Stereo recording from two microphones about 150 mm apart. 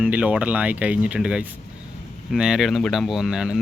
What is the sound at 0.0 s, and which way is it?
Speech, 10° right (ahead or behind).